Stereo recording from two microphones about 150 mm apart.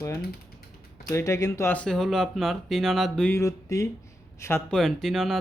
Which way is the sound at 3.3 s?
20° left (ahead or behind).